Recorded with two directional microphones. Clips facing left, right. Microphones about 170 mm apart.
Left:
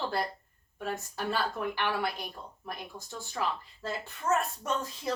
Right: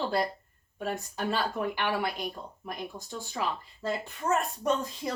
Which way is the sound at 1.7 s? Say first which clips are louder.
Right 1 dB; 15° right (ahead or behind).